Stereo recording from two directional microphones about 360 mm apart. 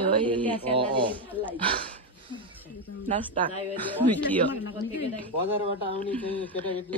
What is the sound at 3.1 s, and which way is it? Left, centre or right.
Speech, centre.